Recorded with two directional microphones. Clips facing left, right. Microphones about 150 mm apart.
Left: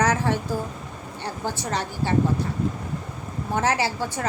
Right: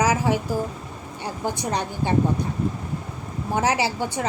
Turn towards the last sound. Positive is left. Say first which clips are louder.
# right 2 dB
turn(degrees=-15)  # may be behind; listen again after turning